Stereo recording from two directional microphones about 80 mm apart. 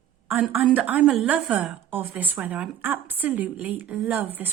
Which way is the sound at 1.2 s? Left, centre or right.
Centre.